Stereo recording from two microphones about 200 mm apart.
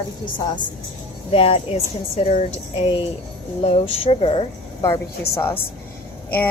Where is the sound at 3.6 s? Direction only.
30° left (ahead or behind).